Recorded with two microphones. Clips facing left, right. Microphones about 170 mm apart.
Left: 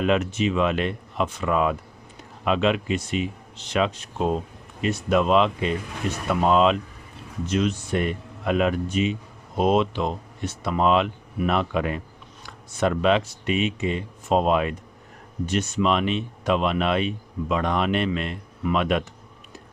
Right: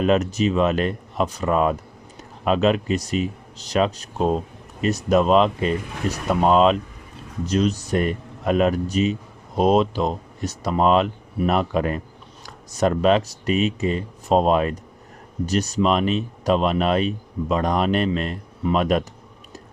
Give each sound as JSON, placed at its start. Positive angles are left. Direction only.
{"t": 0.0, "sound": "speech", "side_deg": -40}